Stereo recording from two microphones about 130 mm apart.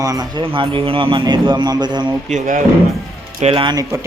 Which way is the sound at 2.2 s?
75° right (ahead or behind).